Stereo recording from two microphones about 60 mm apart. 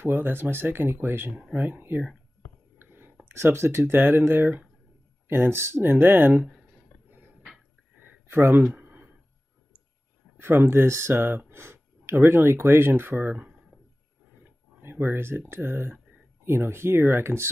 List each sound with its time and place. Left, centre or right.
0.0 s speech: right
2.8 s whispering: right
3.3 s speech: right
7.1 s a sound: right
8.7 s a sound: right
10.3 s speech: right
14.8 s speech: right